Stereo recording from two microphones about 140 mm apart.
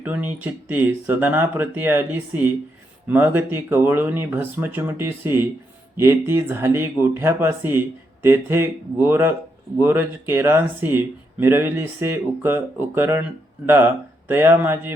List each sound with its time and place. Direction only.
0.0 s speech: 10° right (ahead or behind)